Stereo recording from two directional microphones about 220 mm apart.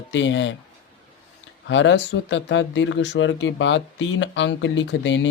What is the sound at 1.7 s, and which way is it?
Speech, 55° left (ahead or behind).